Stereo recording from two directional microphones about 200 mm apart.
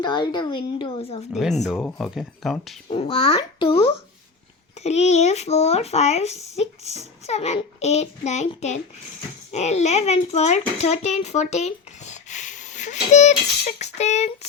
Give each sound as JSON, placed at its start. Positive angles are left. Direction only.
{"t": 0.0, "sound": "speech", "side_deg": 20}
{"t": 1.3, "sound": "speech", "side_deg": 0}
{"t": 2.9, "sound": "speech", "side_deg": 30}